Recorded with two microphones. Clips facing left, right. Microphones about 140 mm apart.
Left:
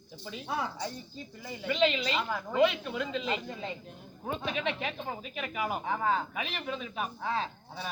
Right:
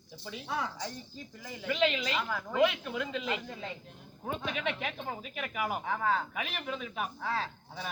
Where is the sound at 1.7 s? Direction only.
10° right (ahead or behind).